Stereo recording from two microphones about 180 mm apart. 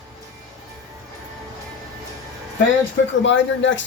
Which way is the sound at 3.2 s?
90° left.